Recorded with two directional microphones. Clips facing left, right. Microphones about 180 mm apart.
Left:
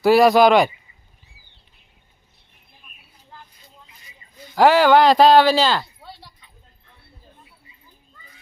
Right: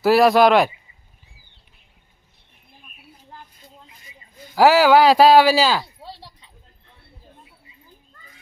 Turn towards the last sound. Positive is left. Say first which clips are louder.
# right 3 dB
turn(degrees=-35)  # may be behind; listen again after turning